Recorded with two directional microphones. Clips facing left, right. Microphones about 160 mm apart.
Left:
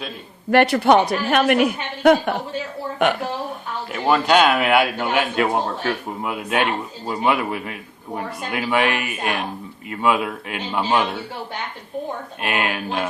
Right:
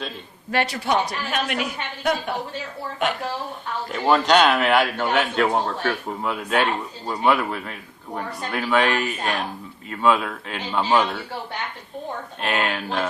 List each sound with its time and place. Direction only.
0.5 s speech: 60° left (ahead or behind)
3.9 s a man's voice: 5° left (ahead or behind)
12.4 s a man's voice: 10° left (ahead or behind)